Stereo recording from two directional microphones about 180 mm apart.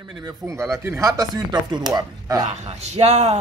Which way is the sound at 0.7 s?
15° right (ahead or behind).